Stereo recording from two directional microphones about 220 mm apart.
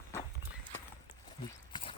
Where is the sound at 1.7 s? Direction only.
25° left (ahead or behind).